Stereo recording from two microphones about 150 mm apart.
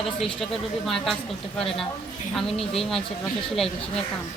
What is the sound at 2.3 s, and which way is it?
Speech, centre (ahead or behind).